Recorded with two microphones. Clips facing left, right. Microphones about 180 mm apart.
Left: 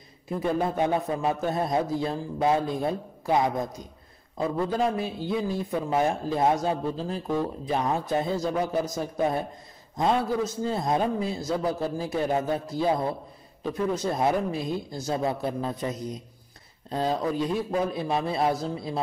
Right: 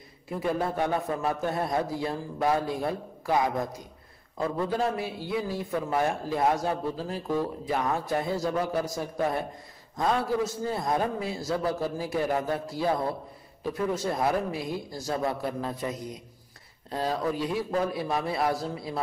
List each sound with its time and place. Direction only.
0.4 s a man's voice: 20° left (ahead or behind)
4.7 s a man's voice: 20° left (ahead or behind)